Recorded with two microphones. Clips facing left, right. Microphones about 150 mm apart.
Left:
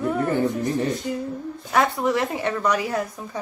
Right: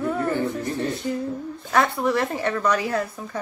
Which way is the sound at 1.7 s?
15° left (ahead or behind).